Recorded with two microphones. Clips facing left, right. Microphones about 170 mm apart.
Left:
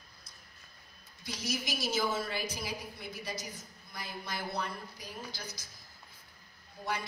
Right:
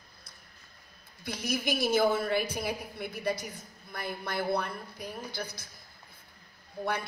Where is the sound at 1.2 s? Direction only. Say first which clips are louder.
Right 5 dB; 60° right (ahead or behind).